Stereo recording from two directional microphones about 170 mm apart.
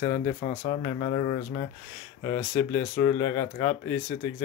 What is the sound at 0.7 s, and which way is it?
Speech, 35° left (ahead or behind).